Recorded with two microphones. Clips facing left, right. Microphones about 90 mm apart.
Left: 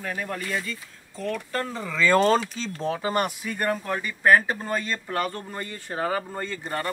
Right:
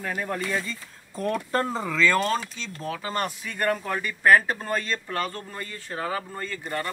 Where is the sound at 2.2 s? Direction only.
35° left (ahead or behind).